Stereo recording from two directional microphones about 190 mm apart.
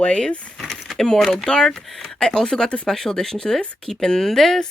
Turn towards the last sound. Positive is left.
turn(degrees=0)  # may be behind; listen again after turning